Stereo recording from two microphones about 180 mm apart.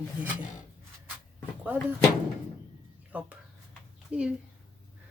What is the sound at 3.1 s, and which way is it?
Speech, 5° right (ahead or behind).